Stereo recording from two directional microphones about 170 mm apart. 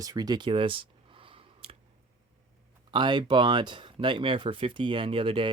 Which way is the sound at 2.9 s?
25° right (ahead or behind).